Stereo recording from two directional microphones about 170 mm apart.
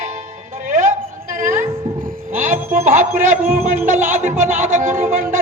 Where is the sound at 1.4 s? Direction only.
50° right (ahead or behind).